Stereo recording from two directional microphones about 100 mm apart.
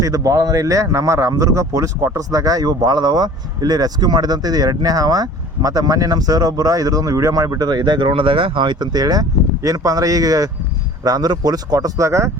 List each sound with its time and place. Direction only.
0.0 s speech: 35° right (ahead or behind)